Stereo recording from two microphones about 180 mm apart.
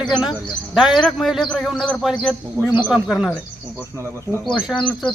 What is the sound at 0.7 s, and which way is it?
A man's voice, centre (ahead or behind).